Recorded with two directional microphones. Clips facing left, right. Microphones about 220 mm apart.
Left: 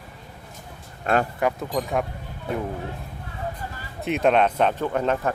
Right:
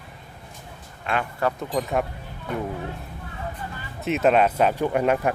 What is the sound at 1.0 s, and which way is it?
Speech, 40° left (ahead or behind).